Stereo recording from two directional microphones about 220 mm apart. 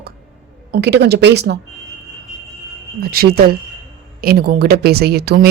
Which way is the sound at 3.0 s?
45° right (ahead or behind).